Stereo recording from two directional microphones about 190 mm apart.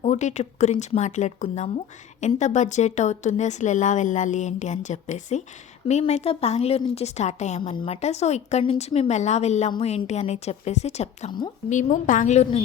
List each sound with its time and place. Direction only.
0.0 s a woman's voice: 40° left (ahead or behind)
11.3 s a woman's voice: 25° left (ahead or behind)
11.7 s a woman's voice: 40° left (ahead or behind)